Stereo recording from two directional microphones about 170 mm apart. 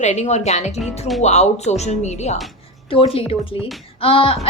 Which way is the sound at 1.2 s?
40° left (ahead or behind).